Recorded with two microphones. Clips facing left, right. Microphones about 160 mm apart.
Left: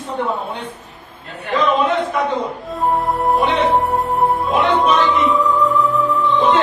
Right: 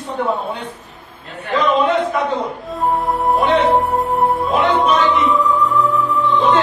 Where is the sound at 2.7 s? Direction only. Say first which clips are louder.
Even; centre (ahead or behind).